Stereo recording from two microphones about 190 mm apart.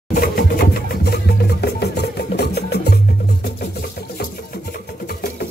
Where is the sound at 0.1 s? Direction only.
50° left (ahead or behind).